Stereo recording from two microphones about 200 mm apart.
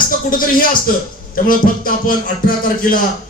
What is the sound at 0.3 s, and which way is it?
Speech, 45° left (ahead or behind).